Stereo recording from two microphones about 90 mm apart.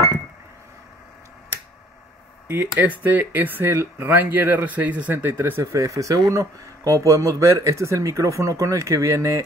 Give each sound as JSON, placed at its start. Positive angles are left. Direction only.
{"t": 2.4, "sound": "speech", "side_deg": -25}
{"t": 4.2, "sound": "speech", "side_deg": -20}
{"t": 5.5, "sound": "speech", "side_deg": -35}